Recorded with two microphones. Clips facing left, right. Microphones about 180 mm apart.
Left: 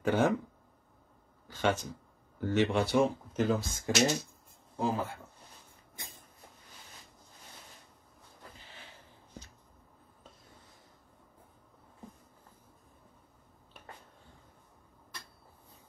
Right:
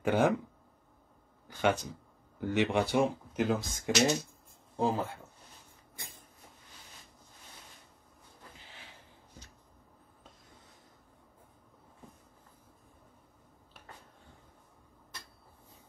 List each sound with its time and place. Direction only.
0.0 s speech: 15° right (ahead or behind)
1.5 s speech: 15° right (ahead or behind)